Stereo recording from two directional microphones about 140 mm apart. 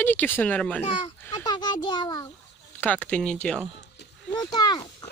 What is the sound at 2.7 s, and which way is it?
Speech, 10° left (ahead or behind).